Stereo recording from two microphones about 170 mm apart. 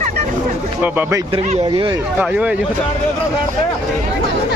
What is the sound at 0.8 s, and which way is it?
Speech, 15° right (ahead or behind).